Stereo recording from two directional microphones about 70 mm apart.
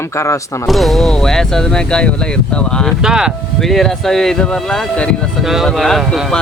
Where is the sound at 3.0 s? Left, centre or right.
Centre.